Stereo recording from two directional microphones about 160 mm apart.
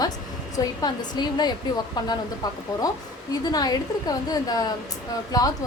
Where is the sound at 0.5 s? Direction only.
25° left (ahead or behind).